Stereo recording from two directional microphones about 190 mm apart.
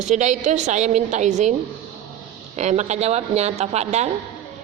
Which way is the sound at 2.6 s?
35° right (ahead or behind).